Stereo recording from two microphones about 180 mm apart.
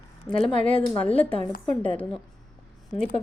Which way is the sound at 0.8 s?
30° left (ahead or behind).